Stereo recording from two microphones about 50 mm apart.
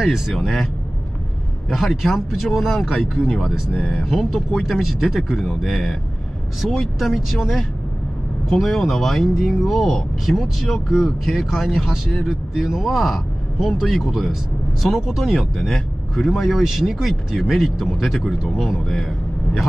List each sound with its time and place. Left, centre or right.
1.7 s speech: centre